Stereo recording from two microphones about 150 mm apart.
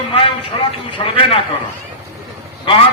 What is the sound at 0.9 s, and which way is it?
Speech, 40° left (ahead or behind).